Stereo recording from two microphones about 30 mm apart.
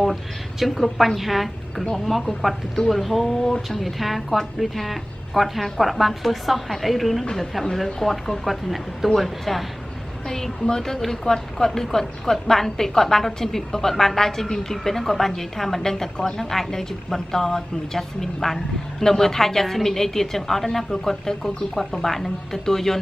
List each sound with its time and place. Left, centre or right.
0.0 s a woman's voice: centre
10.2 s a woman's voice: centre